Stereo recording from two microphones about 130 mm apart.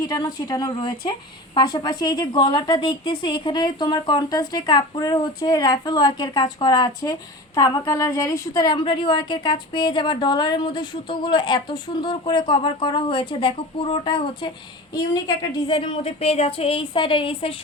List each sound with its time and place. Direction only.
0.0 s a woman's voice: 30° left (ahead or behind)
14.9 s a woman's voice: 30° left (ahead or behind)